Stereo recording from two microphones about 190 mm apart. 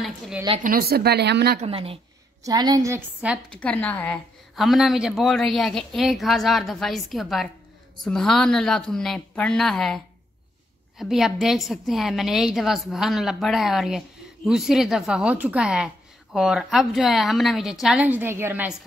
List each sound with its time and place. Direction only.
0.6 s speech: 50° right (ahead or behind)
1.6 s speech: 30° right (ahead or behind)
2.4 s a woman's voice: 20° right (ahead or behind)
3.5 s a woman's voice: 5° left (ahead or behind); by 18.8 s 10° right (ahead or behind)